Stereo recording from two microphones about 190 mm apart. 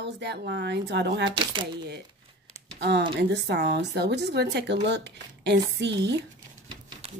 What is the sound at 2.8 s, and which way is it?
Speech, 65° right (ahead or behind).